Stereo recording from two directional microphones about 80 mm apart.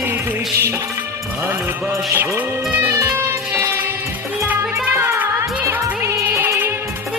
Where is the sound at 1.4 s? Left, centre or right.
Right.